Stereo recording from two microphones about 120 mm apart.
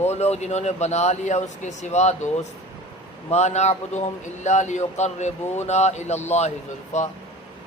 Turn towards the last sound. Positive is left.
turn(degrees=75)  # may be behind; listen again after turning